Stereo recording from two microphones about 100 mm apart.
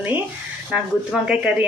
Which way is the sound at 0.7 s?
10° right (ahead or behind).